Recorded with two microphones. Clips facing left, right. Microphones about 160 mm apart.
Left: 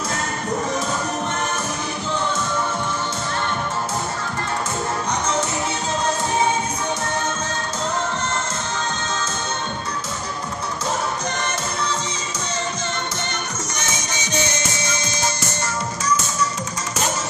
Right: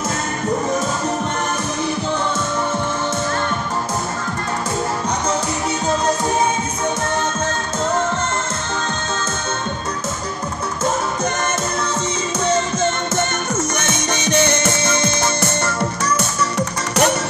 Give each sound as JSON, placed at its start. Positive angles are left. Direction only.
{"t": 12.4, "sound": "music", "side_deg": -50}